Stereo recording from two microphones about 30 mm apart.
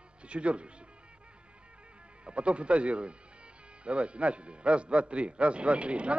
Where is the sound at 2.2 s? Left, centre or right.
Right.